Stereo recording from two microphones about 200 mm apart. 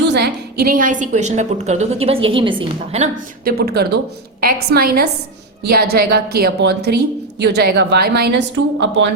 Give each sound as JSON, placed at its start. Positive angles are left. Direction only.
{"t": 0.1, "sound": "a woman's voice", "side_deg": -50}
{"t": 3.4, "sound": "a woman's voice", "side_deg": -50}